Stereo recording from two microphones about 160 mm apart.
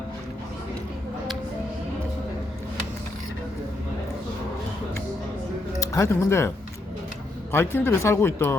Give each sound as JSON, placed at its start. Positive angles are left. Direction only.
{"t": 5.8, "sound": "speech", "side_deg": 20}
{"t": 7.5, "sound": "speech", "side_deg": 15}